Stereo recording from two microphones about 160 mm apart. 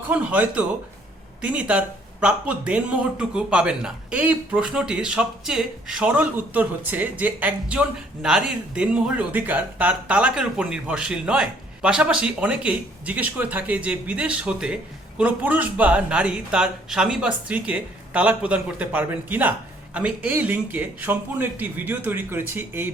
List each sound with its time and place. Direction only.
0.0 s a man's voice: 10° right (ahead or behind)